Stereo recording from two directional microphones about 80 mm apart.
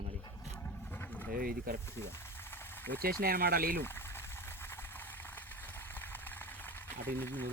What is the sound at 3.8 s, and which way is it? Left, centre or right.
Boiling, left.